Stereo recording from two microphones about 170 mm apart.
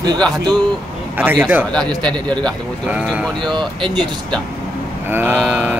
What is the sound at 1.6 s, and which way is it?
Speech, 5° left (ahead or behind).